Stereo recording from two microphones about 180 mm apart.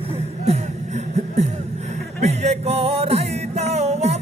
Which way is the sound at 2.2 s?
40° right (ahead or behind).